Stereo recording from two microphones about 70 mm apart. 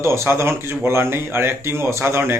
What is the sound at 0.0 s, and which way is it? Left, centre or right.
A man's voice, right.